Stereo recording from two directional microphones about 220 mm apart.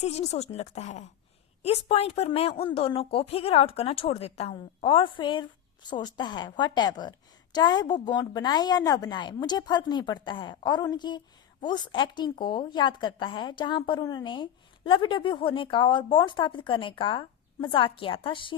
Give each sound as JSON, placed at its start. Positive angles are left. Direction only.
{"t": 0.0, "sound": "a woman's voice", "side_deg": 30}